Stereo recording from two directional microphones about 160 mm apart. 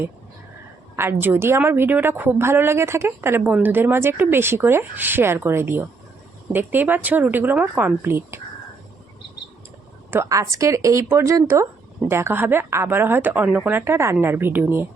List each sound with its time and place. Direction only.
0.9 s a woman's voice: 15° right (ahead or behind)
10.1 s a woman's voice: 15° right (ahead or behind)